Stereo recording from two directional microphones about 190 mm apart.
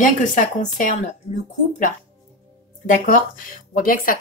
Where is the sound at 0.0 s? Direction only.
45° left (ahead or behind).